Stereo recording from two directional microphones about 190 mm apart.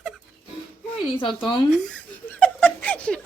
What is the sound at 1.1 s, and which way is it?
Speech, 25° left (ahead or behind).